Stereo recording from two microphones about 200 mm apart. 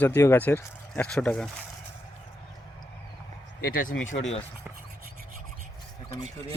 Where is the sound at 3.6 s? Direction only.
45° left (ahead or behind).